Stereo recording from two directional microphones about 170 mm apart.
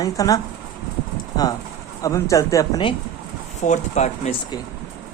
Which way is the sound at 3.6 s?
40° left (ahead or behind).